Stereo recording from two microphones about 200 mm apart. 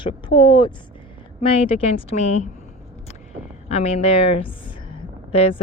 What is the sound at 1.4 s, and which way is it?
Speech, 30° left (ahead or behind).